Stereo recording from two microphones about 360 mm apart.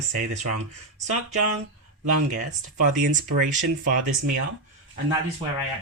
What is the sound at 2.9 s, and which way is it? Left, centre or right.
Speech, right.